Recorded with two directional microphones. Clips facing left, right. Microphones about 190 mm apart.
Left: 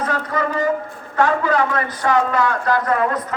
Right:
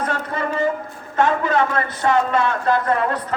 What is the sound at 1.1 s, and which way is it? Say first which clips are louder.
A man's voice: left 1 dB; 25° right (ahead or behind).